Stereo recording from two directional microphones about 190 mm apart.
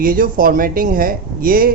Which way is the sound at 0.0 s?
50° right (ahead or behind).